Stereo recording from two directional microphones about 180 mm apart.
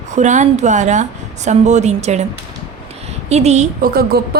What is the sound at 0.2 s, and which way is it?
A woman's voice, 40° right (ahead or behind).